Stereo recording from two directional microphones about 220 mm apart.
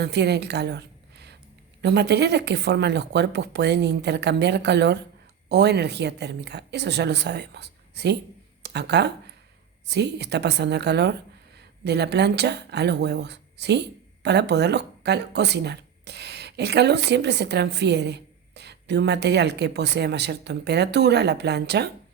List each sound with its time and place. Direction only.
0.0 s a woman's voice: 50° right (ahead or behind)